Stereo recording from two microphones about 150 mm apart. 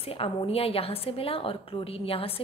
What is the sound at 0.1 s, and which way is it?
A woman's voice, 40° left (ahead or behind).